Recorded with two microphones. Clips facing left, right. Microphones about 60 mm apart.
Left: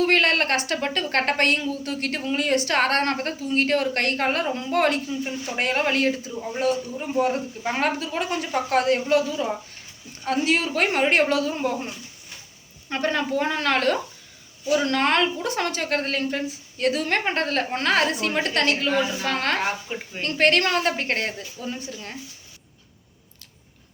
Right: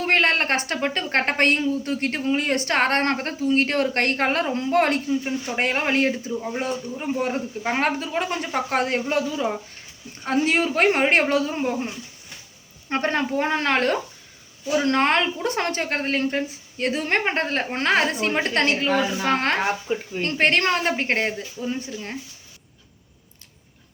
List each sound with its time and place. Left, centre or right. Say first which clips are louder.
0.0 s a man's voice: even; right
5.2 s a man's voice: right 2 dB; right
12.9 s a woman's voice: right 1 dB; right
15.4 s a woman's voice: right 1 dB; right